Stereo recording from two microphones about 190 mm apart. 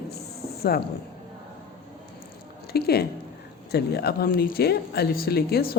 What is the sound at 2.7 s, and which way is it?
Speech, 55° left (ahead or behind).